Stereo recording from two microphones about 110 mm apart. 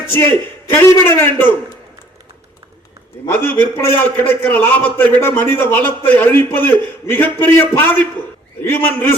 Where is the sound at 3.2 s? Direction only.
20° left (ahead or behind).